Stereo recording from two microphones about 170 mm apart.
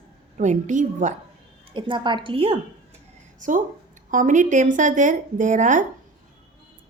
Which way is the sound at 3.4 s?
50° right (ahead or behind).